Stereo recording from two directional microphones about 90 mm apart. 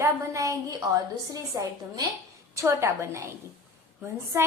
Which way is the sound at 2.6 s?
30° right (ahead or behind).